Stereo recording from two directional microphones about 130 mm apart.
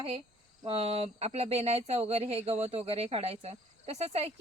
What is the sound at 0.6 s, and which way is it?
A woman's voice, 45° right (ahead or behind).